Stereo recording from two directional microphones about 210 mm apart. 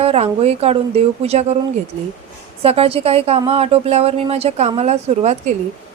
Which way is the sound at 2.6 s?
25° right (ahead or behind).